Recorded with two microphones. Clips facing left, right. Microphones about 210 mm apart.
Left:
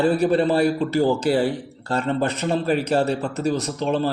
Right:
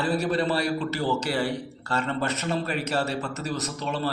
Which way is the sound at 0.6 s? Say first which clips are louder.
Left 8 dB; 50° left (ahead or behind).